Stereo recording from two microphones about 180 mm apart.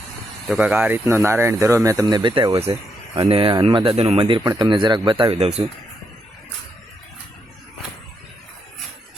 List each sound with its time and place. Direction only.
0.4 s speech: 5° right (ahead or behind); by 5.6 s 35° right (ahead or behind)